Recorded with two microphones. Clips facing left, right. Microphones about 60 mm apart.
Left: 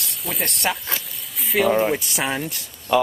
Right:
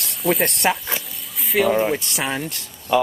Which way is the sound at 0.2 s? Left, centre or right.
Centre.